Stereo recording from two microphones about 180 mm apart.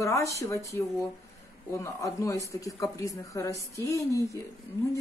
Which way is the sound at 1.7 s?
15° left (ahead or behind).